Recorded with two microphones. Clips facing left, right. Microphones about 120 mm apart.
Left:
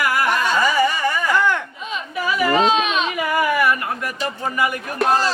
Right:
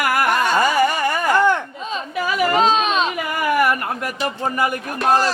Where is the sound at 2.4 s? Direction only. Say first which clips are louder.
Even; 35° right (ahead or behind).